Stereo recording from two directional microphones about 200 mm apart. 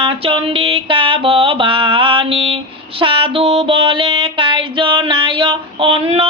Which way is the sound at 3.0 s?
25° right (ahead or behind).